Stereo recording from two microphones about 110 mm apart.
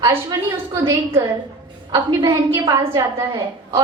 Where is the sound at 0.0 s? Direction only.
30° right (ahead or behind).